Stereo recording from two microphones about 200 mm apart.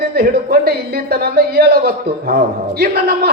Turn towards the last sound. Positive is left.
turn(degrees=-50)  # may be behind; listen again after turning